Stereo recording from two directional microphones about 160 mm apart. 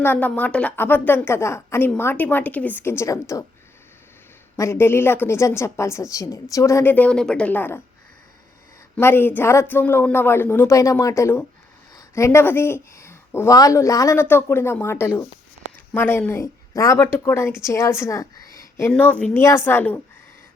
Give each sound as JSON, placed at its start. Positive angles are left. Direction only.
{"t": 0.0, "sound": "speech", "side_deg": 10}
{"t": 4.5, "sound": "speech", "side_deg": 15}
{"t": 9.0, "sound": "speech", "side_deg": 15}
{"t": 18.9, "sound": "speech", "side_deg": 10}